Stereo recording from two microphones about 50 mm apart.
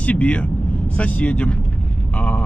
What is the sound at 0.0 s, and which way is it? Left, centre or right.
Speech, left.